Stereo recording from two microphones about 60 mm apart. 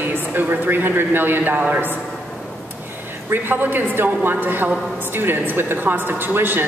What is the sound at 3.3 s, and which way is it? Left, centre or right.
A woman's voice, right.